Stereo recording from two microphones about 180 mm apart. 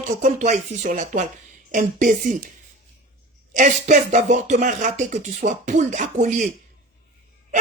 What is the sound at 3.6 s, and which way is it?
A woman's voice, 45° right (ahead or behind).